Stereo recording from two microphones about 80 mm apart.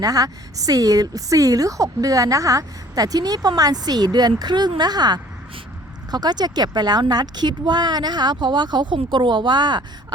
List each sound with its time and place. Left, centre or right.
0.0 s a woman's voice: right